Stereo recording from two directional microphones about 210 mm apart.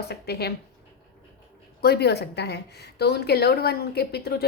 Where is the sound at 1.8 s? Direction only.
50° left (ahead or behind).